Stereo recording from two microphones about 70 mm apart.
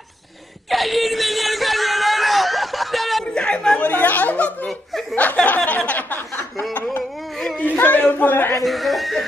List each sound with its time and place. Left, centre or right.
0.7 s wail: centre
3.3 s chatter: centre
3.9 s a sound: left
7.3 s a sound: centre
7.7 s a man's voice: left
8.6 s speech: centre